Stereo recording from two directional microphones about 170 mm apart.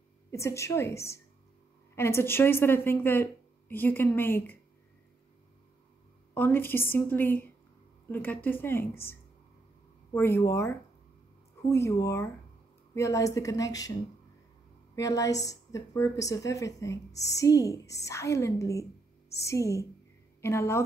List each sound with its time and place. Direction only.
0.3 s a woman's voice: 15° left (ahead or behind)
6.3 s a woman's voice: 10° left (ahead or behind)
10.1 s a woman's voice: 15° left (ahead or behind)
15.0 s a woman's voice: 20° left (ahead or behind)